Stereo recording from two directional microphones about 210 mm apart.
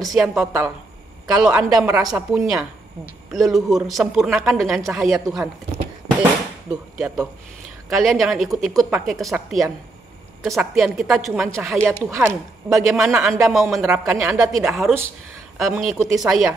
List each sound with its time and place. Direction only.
0.0 s speech: centre (ahead or behind)
5.2 s speech: 15° right (ahead or behind)
6.7 s speech: centre (ahead or behind)
10.4 s speech: centre (ahead or behind)